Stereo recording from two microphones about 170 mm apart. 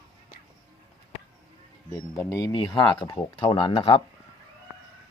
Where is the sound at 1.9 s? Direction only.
20° left (ahead or behind); by 4.0 s 35° left (ahead or behind).